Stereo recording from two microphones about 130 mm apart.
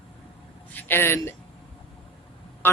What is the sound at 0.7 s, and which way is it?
Speech, 15° left (ahead or behind).